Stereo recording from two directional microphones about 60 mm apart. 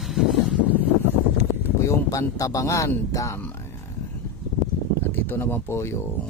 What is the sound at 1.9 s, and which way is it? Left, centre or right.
Speech, left.